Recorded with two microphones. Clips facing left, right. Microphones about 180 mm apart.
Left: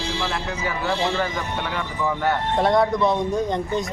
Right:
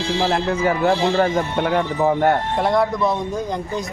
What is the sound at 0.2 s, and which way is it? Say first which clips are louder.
Speech: right 8 dB; 50° right (ahead or behind).